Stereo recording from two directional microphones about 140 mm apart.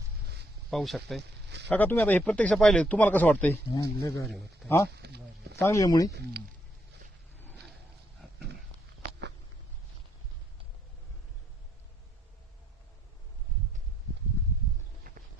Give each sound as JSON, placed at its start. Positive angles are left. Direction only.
{"t": 0.7, "sound": "speech", "side_deg": 0}
{"t": 1.7, "sound": "speech", "side_deg": 10}
{"t": 3.7, "sound": "speech", "side_deg": 25}
{"t": 4.3, "sound": "speech", "side_deg": 0}
{"t": 5.5, "sound": "speech", "side_deg": 20}
{"t": 7.5, "sound": "a sound", "side_deg": 0}
{"t": 15.1, "sound": "music", "side_deg": -90}